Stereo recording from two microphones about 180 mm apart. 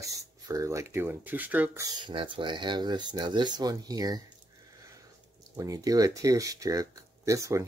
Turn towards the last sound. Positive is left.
turn(degrees=-15)  # may be behind; listen again after turning